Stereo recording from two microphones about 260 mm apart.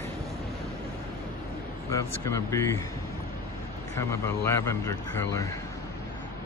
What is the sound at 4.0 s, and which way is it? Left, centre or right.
Speech, centre.